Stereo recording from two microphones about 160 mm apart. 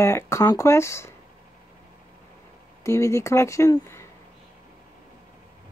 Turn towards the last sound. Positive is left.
turn(degrees=20)  # may be behind; listen again after turning